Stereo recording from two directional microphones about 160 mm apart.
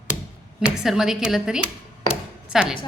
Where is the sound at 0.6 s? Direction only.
5° right (ahead or behind).